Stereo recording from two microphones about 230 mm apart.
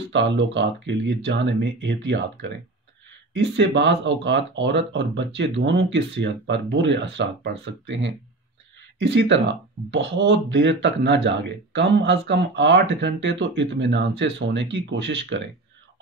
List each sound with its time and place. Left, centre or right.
0.0 s speech: right
3.3 s speech: right